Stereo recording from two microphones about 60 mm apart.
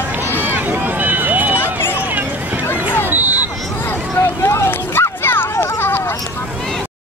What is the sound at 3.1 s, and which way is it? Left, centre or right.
Hubbub, right.